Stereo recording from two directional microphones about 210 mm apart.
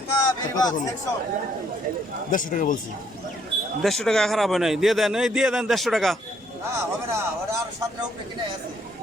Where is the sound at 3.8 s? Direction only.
Centre (ahead or behind).